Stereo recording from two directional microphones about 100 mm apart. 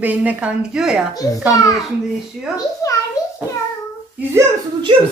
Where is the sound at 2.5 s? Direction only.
35° left (ahead or behind).